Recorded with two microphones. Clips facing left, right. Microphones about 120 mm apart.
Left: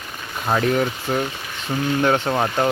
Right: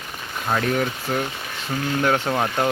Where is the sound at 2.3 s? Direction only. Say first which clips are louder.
Left 2 dB; 5° left (ahead or behind).